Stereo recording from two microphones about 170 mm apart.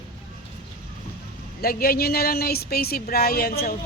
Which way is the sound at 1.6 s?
60° left (ahead or behind).